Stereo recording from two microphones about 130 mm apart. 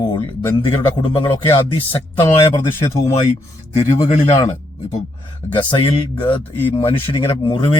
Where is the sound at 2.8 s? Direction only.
60° left (ahead or behind).